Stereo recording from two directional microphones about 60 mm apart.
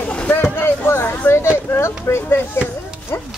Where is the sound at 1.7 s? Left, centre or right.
Left.